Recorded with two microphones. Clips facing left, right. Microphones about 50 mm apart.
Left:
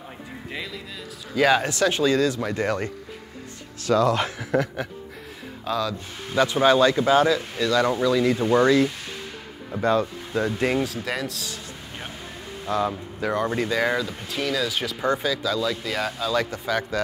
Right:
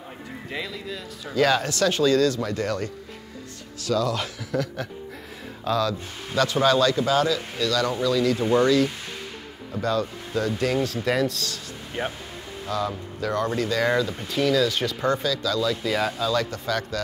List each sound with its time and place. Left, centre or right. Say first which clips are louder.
0.5 s speech: right 2 dB; centre
1.3 s speech: left 1 dB; centre; by 4.6 s left
5.7 s speech: right 2 dB; centre
6.3 s speech: left 2 dB; centre
10.8 s speech: right 4 dB; centre
12.0 s speech: right 10 dB; right
12.6 s speech: left 3 dB; left; by 16.3 s centre
16.3 s speech: left 1 dB; centre